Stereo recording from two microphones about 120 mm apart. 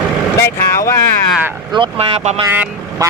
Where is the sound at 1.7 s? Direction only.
40° right (ahead or behind).